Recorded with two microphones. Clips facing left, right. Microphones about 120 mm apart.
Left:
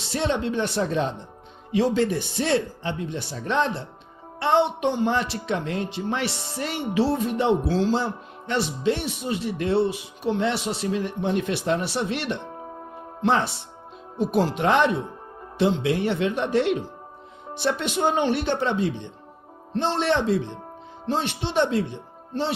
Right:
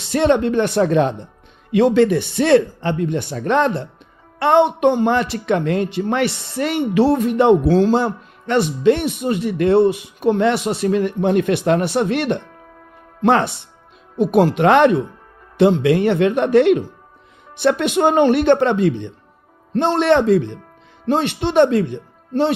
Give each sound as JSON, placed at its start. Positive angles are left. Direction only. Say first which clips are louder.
{"t": 0.1, "sound": "speech", "louder": "right 9 dB", "side_deg": -60}